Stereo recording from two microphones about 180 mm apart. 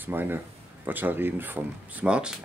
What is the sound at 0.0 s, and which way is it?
Speech, 10° right (ahead or behind).